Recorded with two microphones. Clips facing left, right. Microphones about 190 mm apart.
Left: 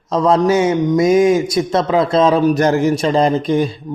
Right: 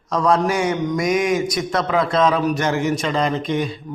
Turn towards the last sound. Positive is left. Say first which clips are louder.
# left 6 dB
turn(degrees=35)  # may be behind; listen again after turning